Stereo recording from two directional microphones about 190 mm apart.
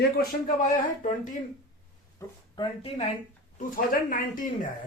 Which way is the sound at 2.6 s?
20° left (ahead or behind).